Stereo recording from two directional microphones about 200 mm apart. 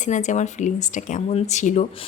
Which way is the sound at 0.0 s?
40° left (ahead or behind).